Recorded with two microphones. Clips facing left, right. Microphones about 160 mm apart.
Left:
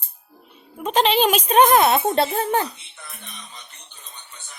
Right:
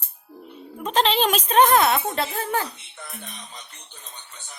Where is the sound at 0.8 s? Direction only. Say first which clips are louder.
Left 3 dB; 10° left (ahead or behind); by 2.7 s 30° left (ahead or behind).